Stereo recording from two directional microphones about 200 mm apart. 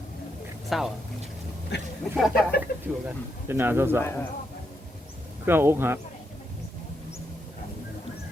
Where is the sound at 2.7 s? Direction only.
50° left (ahead or behind).